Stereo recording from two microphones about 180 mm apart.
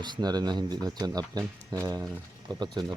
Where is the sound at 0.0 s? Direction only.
25° right (ahead or behind).